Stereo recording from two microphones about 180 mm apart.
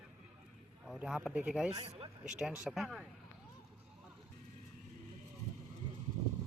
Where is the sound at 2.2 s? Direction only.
5° right (ahead or behind).